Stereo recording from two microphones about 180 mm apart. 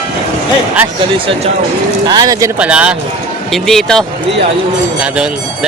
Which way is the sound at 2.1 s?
20° right (ahead or behind).